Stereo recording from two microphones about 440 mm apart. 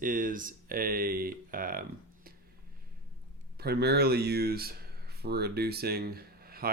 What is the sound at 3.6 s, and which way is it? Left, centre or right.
Speech, right.